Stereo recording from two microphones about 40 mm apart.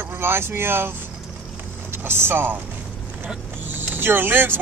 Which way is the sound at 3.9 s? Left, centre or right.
Right.